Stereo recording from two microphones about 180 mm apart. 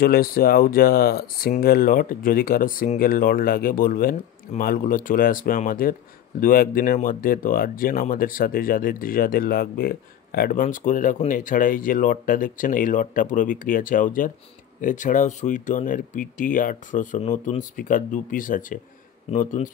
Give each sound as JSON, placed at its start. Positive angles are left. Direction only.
{"t": 0.0, "sound": "speech", "side_deg": 55}